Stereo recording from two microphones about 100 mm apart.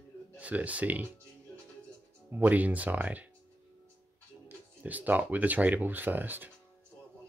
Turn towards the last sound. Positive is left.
turn(degrees=-20)  # may be behind; listen again after turning